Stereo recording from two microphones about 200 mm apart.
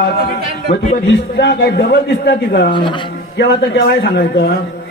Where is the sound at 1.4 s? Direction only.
55° left (ahead or behind).